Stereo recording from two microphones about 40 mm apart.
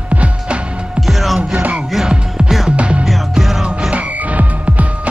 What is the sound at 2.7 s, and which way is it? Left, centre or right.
Music, right.